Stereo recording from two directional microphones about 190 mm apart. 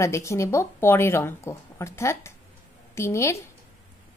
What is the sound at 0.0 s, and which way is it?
A woman's voice, 15° left (ahead or behind).